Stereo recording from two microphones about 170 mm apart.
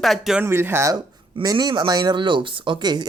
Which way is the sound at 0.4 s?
15° right (ahead or behind).